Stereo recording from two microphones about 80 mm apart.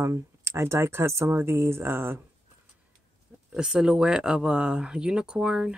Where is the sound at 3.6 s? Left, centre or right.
Centre.